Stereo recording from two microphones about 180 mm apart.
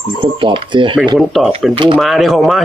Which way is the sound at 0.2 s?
30° right (ahead or behind).